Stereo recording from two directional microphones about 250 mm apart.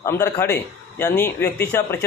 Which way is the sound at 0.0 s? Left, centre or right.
Centre.